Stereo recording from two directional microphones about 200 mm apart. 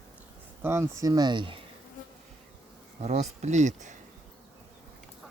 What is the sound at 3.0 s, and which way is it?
Speech, 35° right (ahead or behind).